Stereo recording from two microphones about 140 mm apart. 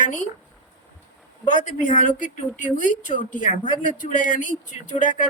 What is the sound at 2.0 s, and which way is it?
A woman's voice, 65° left (ahead or behind).